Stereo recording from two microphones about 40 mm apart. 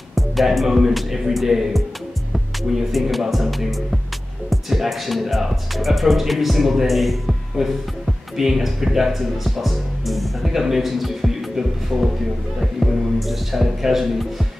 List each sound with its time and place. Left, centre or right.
0.1 s speech: centre